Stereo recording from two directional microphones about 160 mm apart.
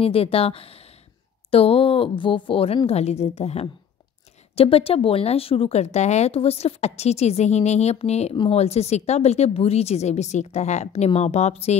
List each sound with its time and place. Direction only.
0.0 s a woman's voice: 35° left (ahead or behind)